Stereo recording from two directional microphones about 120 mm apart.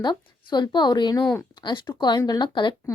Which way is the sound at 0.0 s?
40° left (ahead or behind).